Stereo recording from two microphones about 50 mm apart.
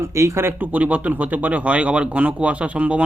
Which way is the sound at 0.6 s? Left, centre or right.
Right.